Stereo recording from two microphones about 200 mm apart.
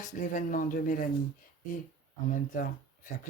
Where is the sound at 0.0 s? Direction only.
40° left (ahead or behind).